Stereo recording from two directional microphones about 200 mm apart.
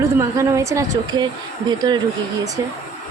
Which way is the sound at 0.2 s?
15° right (ahead or behind).